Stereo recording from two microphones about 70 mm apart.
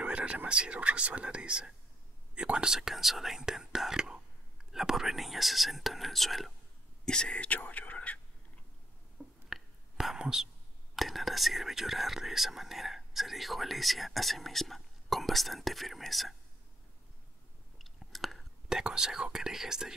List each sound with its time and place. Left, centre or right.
0.0 s speech: centre
7.1 s speech: centre
9.5 s whispering: centre
11.0 s speech: centre
17.7 s whispering: centre